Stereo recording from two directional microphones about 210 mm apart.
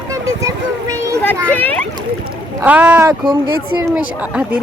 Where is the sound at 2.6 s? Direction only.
5° right (ahead or behind).